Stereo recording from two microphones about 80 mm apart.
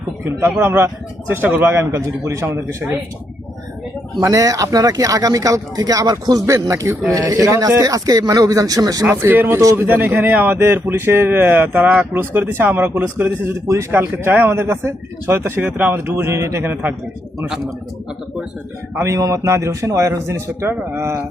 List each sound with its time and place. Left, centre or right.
0.3 s a man's voice: right
4.2 s speech: right
6.4 s a man's voice: right
9.0 s speech: right
9.6 s speech: right
9.8 s speech: right
13.7 s speech: right
18.9 s a man's voice: right